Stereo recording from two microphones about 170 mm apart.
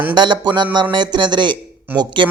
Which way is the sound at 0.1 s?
25° right (ahead or behind).